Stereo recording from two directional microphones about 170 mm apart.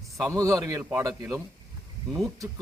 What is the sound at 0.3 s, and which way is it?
Speech, 20° right (ahead or behind).